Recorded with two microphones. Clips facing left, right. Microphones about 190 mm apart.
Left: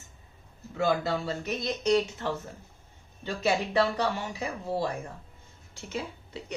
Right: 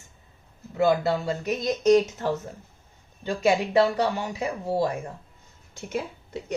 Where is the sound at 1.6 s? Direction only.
45° right (ahead or behind).